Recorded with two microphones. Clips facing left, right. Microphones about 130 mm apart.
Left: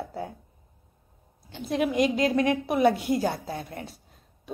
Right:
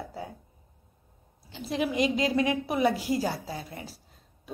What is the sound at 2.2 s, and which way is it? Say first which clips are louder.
Speech: left 2 dB; 55° left (ahead or behind).